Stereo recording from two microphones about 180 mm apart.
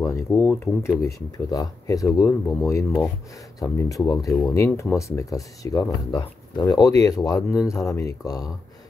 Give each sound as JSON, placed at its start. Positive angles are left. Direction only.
{"t": 0.0, "sound": "speech", "side_deg": 15}